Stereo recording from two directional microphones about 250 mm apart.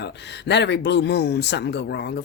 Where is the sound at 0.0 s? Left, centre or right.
Left.